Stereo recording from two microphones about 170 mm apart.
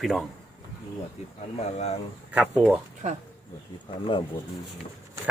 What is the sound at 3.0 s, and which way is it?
Speech, 45° right (ahead or behind).